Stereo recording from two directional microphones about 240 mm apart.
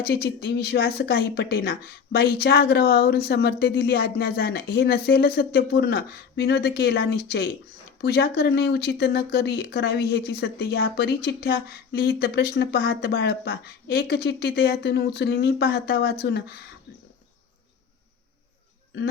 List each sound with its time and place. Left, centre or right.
0.0 s speech: left